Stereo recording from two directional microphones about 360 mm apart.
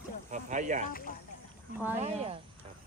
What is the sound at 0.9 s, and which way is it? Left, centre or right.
Speech, left.